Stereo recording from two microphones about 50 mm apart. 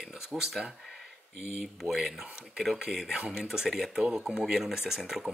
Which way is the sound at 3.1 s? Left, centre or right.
Centre.